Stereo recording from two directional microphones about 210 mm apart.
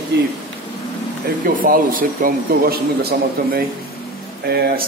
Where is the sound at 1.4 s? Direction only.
45° right (ahead or behind).